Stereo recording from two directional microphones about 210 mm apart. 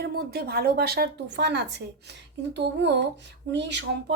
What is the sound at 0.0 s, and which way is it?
Speech, 50° right (ahead or behind).